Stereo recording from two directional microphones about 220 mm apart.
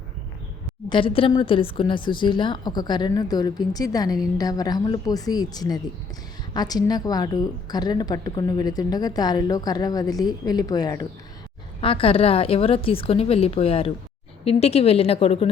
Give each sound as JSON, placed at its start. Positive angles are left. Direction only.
{"t": 0.9, "sound": "a woman's voice", "side_deg": 25}